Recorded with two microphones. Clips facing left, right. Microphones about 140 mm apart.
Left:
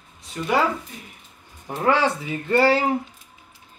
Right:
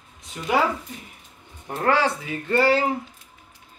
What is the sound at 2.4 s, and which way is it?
Speech, 25° left (ahead or behind).